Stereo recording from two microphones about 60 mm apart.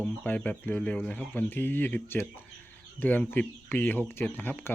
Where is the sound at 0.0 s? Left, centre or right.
Left.